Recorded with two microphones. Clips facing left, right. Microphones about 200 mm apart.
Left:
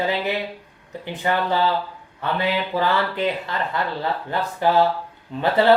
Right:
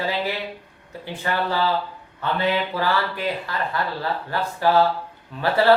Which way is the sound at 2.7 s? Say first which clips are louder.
Left 2 dB; 20° left (ahead or behind).